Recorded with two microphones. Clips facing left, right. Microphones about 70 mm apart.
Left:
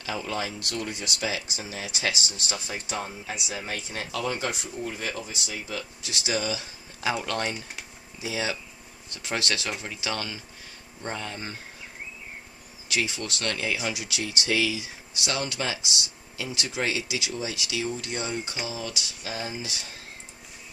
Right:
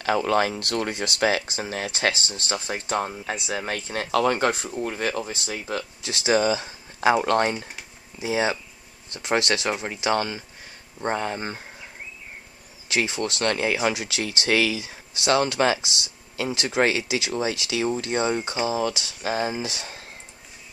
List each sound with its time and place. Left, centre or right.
0.0 s speech: right
4.8 s speech: right
6.0 s speech: right
12.8 s speech: right
18.7 s speech: right